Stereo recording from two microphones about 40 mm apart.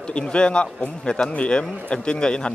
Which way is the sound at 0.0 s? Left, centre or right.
Left.